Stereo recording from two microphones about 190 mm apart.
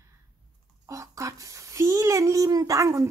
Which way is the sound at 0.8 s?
15° right (ahead or behind).